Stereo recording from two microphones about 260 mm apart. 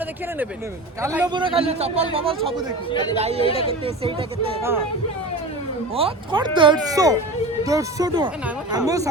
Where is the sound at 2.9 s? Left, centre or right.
Centre.